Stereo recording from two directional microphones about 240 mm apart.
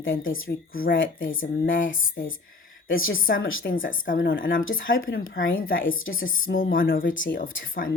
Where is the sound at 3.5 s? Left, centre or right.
Left.